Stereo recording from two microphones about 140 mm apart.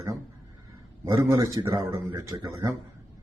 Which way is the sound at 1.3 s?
25° right (ahead or behind).